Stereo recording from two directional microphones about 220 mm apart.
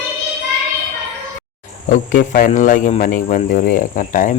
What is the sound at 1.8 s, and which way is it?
Speech, 35° left (ahead or behind).